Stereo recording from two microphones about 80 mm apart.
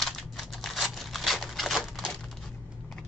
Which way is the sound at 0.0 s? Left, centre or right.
Centre.